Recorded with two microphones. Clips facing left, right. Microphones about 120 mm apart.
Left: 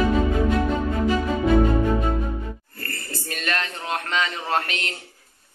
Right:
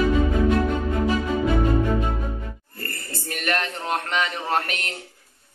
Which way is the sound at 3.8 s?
15° right (ahead or behind).